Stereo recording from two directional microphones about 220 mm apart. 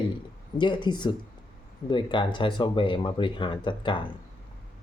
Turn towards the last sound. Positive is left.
turn(degrees=20)  # may be behind; listen again after turning